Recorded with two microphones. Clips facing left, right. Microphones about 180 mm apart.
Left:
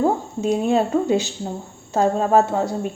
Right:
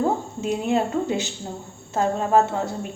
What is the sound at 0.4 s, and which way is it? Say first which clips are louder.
Speech: left 4 dB; 20° left (ahead or behind).